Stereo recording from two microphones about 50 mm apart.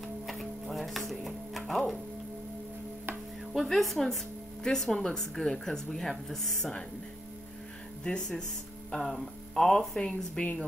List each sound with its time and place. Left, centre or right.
0.3 s music: centre
3.5 s a woman's voice: centre
8.0 s speech: centre